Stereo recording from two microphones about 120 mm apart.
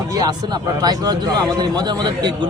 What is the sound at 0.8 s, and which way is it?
A man's voice, 35° right (ahead or behind).